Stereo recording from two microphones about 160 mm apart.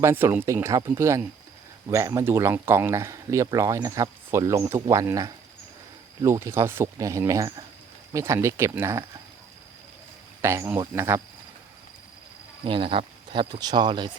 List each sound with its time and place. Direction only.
0.0 s speech: 15° right (ahead or behind)
10.4 s speech: 15° right (ahead or behind)
12.6 s speech: 35° right (ahead or behind)